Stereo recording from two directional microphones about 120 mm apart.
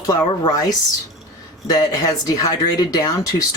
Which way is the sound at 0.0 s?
30° left (ahead or behind).